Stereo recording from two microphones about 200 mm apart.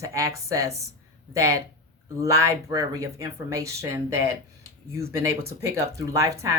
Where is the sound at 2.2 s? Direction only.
15° right (ahead or behind).